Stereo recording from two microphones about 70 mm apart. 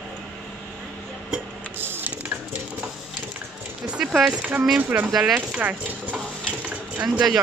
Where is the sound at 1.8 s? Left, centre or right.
Right.